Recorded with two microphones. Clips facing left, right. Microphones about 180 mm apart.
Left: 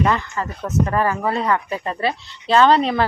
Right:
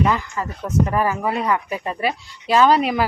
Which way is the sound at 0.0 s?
10° right (ahead or behind).